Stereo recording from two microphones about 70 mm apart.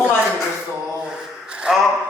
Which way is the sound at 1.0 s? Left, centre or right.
Centre.